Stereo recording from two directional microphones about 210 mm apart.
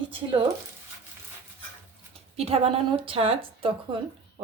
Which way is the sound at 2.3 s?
30° right (ahead or behind).